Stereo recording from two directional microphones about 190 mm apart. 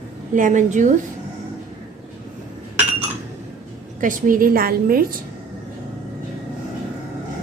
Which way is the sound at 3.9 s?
45° right (ahead or behind).